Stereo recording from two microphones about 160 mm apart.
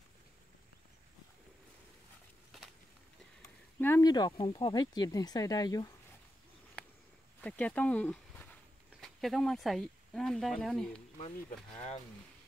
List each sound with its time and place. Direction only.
3.8 s speech: 15° left (ahead or behind)
4.1 s speech: 25° left (ahead or behind)
7.4 s speech: 10° left (ahead or behind)